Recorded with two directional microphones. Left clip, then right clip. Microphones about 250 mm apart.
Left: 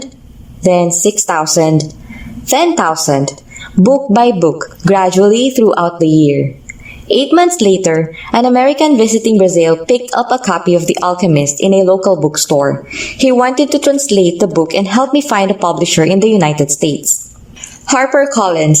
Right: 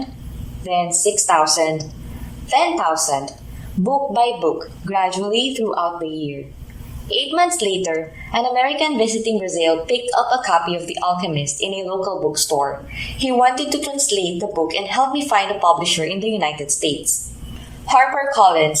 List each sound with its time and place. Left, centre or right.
0.6 s a woman's voice: left